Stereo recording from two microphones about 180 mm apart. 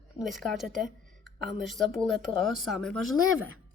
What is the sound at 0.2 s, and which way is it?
Speech, centre (ahead or behind).